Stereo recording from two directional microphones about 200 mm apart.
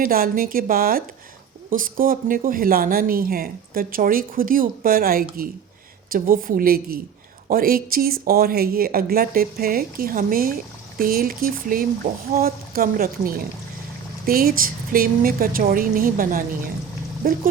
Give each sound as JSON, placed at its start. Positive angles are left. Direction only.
{"t": 0.0, "sound": "speech", "side_deg": -45}